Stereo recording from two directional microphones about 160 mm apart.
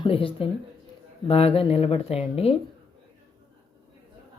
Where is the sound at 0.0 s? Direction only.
35° left (ahead or behind).